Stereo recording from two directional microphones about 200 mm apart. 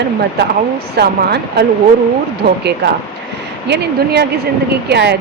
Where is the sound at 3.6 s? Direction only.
55° right (ahead or behind).